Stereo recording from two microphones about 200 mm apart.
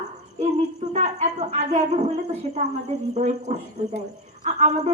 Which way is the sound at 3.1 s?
35° right (ahead or behind).